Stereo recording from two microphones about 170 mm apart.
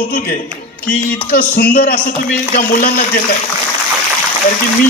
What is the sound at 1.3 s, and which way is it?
A man's voice, 60° left (ahead or behind).